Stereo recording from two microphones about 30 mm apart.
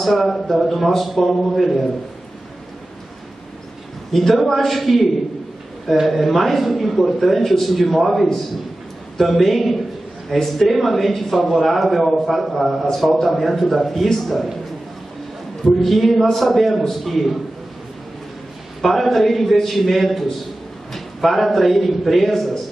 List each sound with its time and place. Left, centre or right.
0.0 s a man's voice: centre
1.5 s a man's voice: centre
4.1 s a man's voice: centre
15.8 s a man's voice: centre
18.8 s a man's voice: centre